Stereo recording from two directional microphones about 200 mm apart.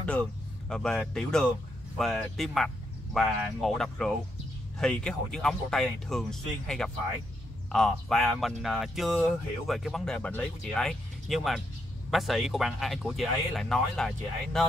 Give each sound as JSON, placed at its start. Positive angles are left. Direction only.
{"t": 0.0, "sound": "speech", "side_deg": 5}